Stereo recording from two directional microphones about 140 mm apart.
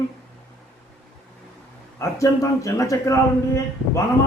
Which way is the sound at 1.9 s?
20° left (ahead or behind).